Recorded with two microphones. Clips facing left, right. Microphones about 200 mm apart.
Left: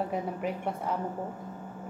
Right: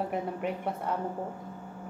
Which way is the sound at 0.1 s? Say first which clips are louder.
Even; centre (ahead or behind).